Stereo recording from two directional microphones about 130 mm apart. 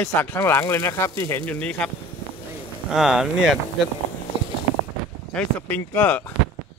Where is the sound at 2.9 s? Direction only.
5° right (ahead or behind).